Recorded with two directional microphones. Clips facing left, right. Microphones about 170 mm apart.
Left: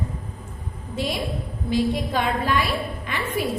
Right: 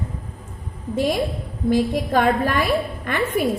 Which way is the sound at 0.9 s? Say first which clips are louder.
Right 6 dB; 50° right (ahead or behind).